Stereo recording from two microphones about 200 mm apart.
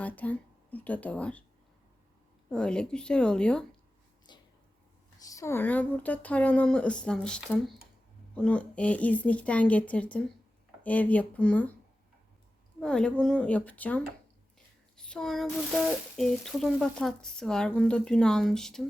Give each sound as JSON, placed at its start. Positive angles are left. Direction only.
{"t": 0.0, "sound": "a woman's voice", "side_deg": 10}
{"t": 2.5, "sound": "speech", "side_deg": 5}
{"t": 4.3, "sound": "a sound", "side_deg": 20}
{"t": 5.2, "sound": "speech", "side_deg": 15}
{"t": 12.8, "sound": "speech", "side_deg": 5}